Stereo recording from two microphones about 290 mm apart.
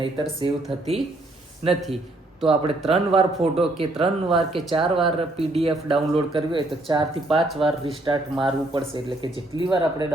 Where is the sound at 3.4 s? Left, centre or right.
Centre.